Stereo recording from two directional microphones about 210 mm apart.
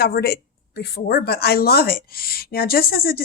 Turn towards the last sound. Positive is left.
turn(degrees=45)  # may be behind; listen again after turning